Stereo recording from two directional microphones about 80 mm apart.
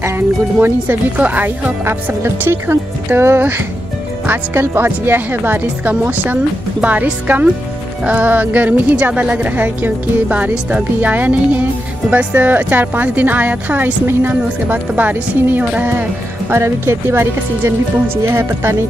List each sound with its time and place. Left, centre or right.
0.6 s speech: right